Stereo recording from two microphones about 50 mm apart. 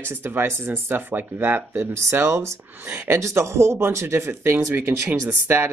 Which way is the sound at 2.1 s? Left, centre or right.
Right.